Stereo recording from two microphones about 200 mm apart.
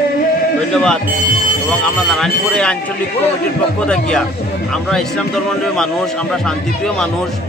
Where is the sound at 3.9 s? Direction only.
5° left (ahead or behind).